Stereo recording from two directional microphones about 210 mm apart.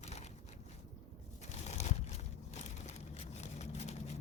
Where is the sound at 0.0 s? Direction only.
30° left (ahead or behind).